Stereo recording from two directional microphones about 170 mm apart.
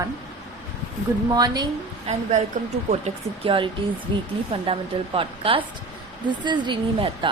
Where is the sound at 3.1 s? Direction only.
40° right (ahead or behind).